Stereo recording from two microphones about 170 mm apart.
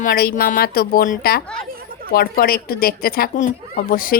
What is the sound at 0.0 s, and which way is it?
Speech, 60° left (ahead or behind).